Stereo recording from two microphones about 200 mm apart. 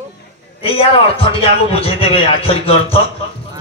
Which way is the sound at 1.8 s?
30° left (ahead or behind).